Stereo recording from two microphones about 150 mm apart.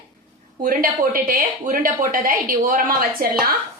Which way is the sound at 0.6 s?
70° right (ahead or behind).